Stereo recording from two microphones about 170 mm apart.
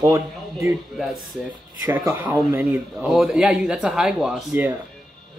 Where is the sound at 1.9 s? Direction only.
15° right (ahead or behind).